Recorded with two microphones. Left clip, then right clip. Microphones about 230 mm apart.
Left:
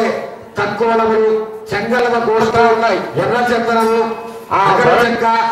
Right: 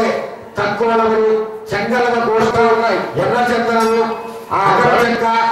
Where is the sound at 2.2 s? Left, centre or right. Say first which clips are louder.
Left 1 dB; centre.